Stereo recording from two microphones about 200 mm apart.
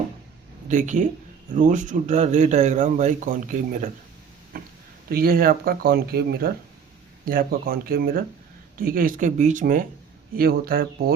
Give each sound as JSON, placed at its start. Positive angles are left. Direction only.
{"t": 0.7, "sound": "a man's voice", "side_deg": -40}
{"t": 4.5, "sound": "a sound", "side_deg": -45}
{"t": 5.1, "sound": "speech", "side_deg": -50}